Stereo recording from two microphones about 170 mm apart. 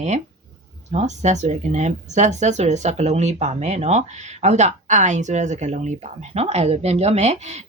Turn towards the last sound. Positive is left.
turn(degrees=-40)  # may be behind; listen again after turning